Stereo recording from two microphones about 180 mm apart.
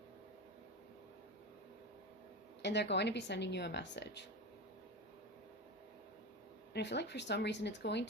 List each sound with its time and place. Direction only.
2.6 s a woman's voice: 70° left (ahead or behind)
6.7 s a woman's voice: 70° left (ahead or behind)